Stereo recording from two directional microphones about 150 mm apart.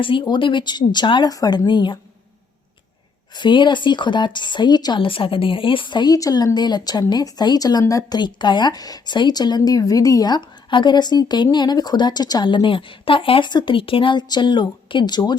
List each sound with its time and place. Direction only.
0.0 s speech: 35° left (ahead or behind)
3.3 s speech: 30° left (ahead or behind)